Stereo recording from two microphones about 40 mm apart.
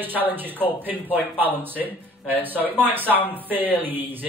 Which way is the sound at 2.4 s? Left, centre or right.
Right.